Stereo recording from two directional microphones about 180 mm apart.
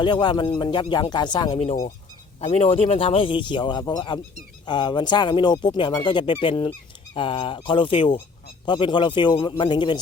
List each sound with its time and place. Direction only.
0.0 s speech: 25° left (ahead or behind)
1.5 s speech: 40° left (ahead or behind)